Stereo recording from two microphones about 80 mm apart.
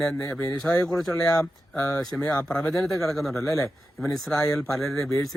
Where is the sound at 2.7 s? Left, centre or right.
Centre.